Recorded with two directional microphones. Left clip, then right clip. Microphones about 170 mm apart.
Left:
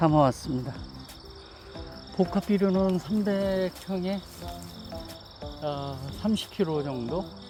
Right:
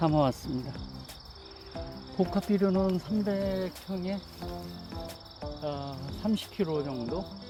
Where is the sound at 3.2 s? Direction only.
50° left (ahead or behind).